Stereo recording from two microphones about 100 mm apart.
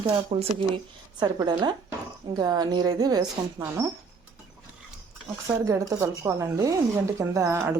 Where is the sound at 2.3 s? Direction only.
40° right (ahead or behind).